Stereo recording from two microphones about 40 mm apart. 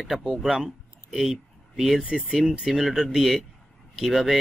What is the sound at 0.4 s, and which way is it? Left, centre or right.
Speech, centre.